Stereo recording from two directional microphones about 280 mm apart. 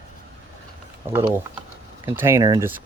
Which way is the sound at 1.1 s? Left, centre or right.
Centre.